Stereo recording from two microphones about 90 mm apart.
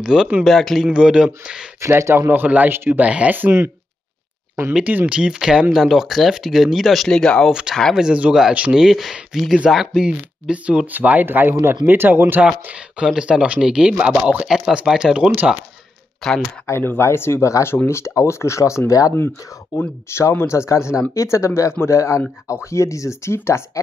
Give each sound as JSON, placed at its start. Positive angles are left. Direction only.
{"t": 0.0, "sound": "speech", "side_deg": -5}
{"t": 0.8, "sound": "speech", "side_deg": -10}
{"t": 1.8, "sound": "speech", "side_deg": -30}
{"t": 4.7, "sound": "speech", "side_deg": -15}
{"t": 7.9, "sound": "speech", "side_deg": -10}
{"t": 16.6, "sound": "speech", "side_deg": 25}
{"t": 19.8, "sound": "speech", "side_deg": 25}